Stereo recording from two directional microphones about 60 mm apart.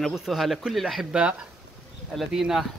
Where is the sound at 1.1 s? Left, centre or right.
Centre.